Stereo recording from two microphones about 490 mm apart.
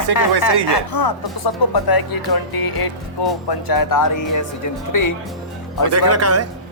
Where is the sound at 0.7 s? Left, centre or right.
Left.